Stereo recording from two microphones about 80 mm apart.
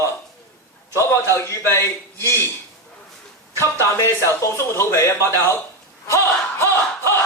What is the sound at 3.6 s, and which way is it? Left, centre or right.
Speech, left.